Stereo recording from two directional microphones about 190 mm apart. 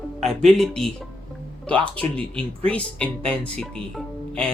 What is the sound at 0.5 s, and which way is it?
Speech, 5° left (ahead or behind).